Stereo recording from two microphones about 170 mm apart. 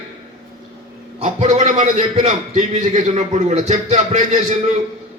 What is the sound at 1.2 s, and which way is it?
A man's voice, 40° right (ahead or behind).